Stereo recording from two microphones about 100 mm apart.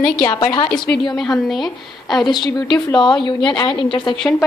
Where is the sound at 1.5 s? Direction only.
Centre (ahead or behind).